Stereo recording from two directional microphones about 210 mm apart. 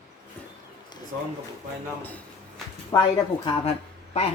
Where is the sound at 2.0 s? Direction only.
5° left (ahead or behind).